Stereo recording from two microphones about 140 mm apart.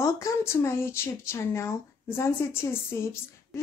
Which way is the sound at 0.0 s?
20° left (ahead or behind).